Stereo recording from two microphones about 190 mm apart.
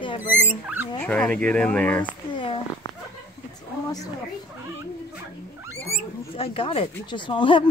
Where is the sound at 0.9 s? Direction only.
5° left (ahead or behind).